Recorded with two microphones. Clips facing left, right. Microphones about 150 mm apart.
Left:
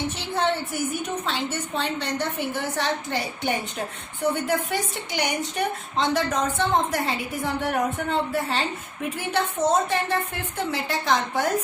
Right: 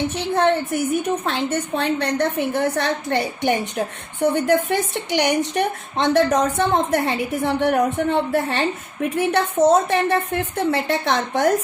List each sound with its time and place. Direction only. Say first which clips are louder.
0.3 s a woman's voice: right 6 dB; 60° right (ahead or behind)